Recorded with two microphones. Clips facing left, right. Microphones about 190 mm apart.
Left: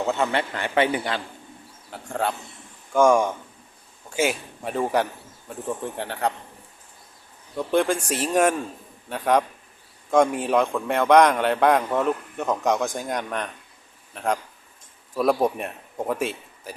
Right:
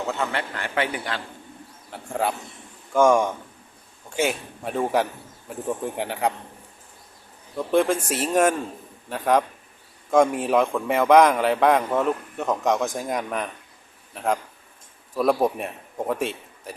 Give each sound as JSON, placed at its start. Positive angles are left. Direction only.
{"t": 0.1, "sound": "a man's voice", "side_deg": 20}
{"t": 1.9, "sound": "a man's voice", "side_deg": -5}
{"t": 7.5, "sound": "a man's voice", "side_deg": 0}